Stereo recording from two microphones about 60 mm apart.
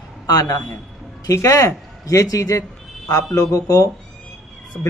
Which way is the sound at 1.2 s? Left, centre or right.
Left.